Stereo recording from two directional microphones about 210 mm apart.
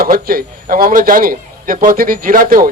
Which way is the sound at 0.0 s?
45° right (ahead or behind).